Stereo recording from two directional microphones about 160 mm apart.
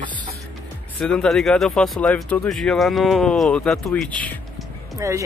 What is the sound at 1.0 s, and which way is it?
Speech, 5° left (ahead or behind).